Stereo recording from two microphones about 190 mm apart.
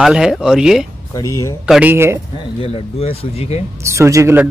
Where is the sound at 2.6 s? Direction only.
30° left (ahead or behind).